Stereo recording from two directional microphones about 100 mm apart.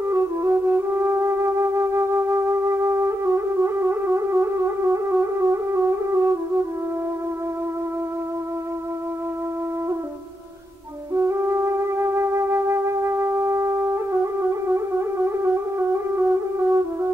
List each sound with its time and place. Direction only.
0.1 s music: 25° right (ahead or behind)
11.1 s music: 25° right (ahead or behind)
16.2 s brass instrument: 25° right (ahead or behind)